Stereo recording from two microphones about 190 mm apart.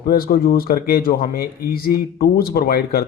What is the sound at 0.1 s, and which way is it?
Speech, 50° left (ahead or behind).